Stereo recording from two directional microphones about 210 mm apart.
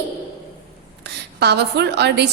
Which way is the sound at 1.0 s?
50° right (ahead or behind).